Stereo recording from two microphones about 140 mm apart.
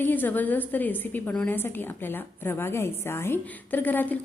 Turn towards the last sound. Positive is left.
turn(degrees=15)  # may be behind; listen again after turning